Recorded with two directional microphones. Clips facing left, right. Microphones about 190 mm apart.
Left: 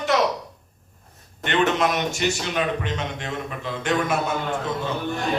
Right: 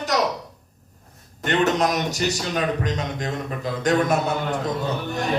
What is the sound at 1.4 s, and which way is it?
A man's voice, 40° right (ahead or behind).